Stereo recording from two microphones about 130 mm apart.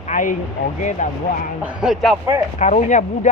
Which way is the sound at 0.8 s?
70° left (ahead or behind).